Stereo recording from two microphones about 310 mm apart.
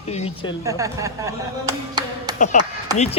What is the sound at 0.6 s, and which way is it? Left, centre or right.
Speech, centre.